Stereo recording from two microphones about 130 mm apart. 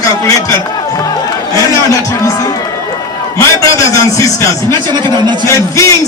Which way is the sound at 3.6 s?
25° left (ahead or behind).